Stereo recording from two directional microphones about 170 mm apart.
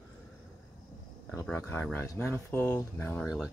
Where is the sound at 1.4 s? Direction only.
15° left (ahead or behind).